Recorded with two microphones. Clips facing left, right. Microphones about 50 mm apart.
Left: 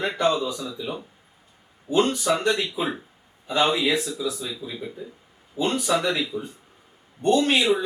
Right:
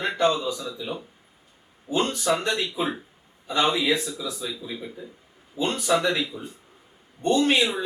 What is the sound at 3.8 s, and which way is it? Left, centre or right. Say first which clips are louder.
Speech: left 1 dB; centre.